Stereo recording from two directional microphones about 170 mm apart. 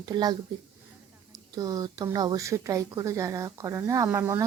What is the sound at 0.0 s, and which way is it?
Speech, 25° right (ahead or behind).